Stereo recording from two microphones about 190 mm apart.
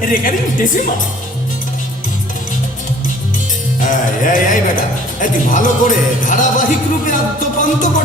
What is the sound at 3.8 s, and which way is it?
Speech, 45° left (ahead or behind).